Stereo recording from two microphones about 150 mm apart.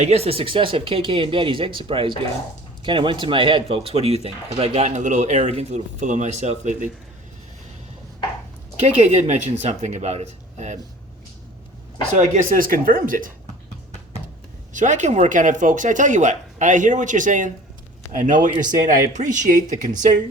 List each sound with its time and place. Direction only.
0.0 s speech: 45° right (ahead or behind)
9.0 s speech: 50° right (ahead or behind)
12.1 s speech: 60° right (ahead or behind)
14.7 s speech: 55° right (ahead or behind)